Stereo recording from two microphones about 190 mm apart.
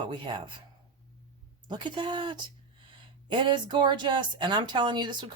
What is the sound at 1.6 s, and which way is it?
Speech, 25° right (ahead or behind).